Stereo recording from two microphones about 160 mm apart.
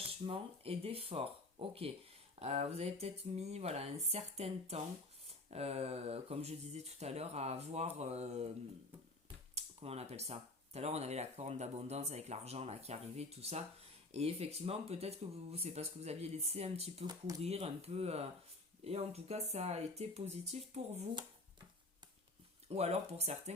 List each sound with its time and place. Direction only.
0.0 s speech: 35° right (ahead or behind)
9.6 s speech: 40° right (ahead or behind)
17.1 s speech: 25° right (ahead or behind)
17.4 s speech: 40° right (ahead or behind)
22.7 s speech: 40° right (ahead or behind)